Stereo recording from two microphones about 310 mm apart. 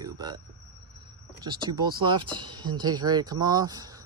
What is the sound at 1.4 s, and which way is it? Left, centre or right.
Speech, centre.